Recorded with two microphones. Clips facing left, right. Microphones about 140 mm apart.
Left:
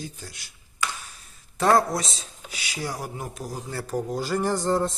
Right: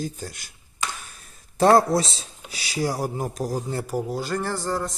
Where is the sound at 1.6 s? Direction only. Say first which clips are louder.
Right 4 dB; 35° right (ahead or behind).